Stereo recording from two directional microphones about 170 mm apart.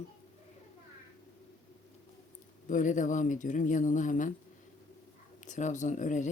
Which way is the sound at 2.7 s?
50° left (ahead or behind).